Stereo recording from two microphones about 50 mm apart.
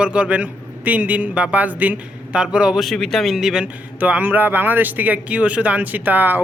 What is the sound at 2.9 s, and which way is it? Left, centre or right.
Speech, centre.